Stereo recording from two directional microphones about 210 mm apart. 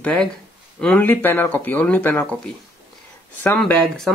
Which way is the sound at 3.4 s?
5° left (ahead or behind).